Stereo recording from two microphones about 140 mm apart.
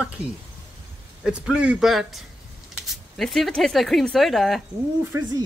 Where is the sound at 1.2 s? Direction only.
5° right (ahead or behind).